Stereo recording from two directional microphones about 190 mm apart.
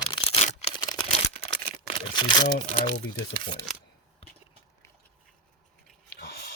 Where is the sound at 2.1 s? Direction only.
20° left (ahead or behind).